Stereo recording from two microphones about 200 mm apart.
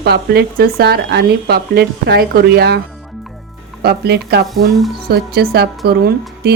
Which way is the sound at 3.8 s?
55° right (ahead or behind).